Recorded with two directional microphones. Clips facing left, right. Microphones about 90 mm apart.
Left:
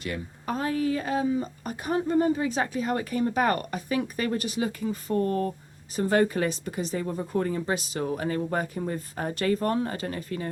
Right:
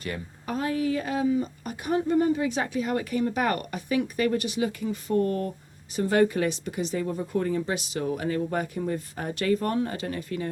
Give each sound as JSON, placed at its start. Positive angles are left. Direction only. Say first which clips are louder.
{"t": 0.4, "sound": "speech", "louder": "even", "side_deg": 35}